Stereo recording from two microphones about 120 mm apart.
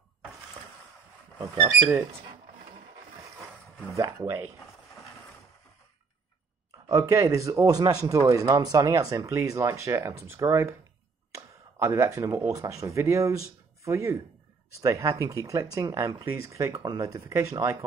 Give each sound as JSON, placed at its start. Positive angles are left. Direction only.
{"t": 3.9, "sound": "speech", "side_deg": -25}
{"t": 6.9, "sound": "speech", "side_deg": -25}